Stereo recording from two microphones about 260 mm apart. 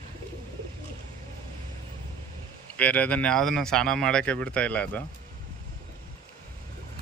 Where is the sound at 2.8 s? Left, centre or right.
Centre.